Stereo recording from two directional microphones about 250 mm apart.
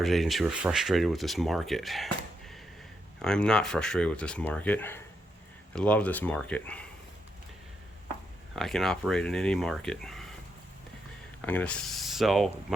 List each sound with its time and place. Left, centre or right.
0.0 s speech: centre
3.2 s speech: centre
8.5 s speech: centre
11.4 s speech: centre